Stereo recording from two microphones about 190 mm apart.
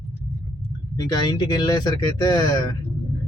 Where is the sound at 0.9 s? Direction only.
20° left (ahead or behind).